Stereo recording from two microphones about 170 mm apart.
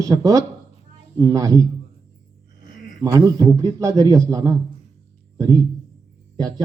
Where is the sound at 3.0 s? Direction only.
20° right (ahead or behind).